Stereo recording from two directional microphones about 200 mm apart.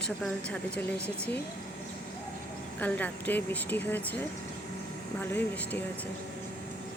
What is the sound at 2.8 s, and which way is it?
Speech, 10° left (ahead or behind).